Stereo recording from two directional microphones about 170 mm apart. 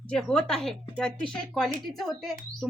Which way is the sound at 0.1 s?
5° left (ahead or behind).